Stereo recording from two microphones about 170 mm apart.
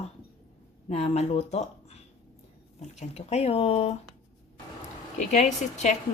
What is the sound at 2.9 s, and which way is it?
Speech, 40° left (ahead or behind).